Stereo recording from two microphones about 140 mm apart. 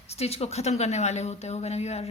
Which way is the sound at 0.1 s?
45° left (ahead or behind).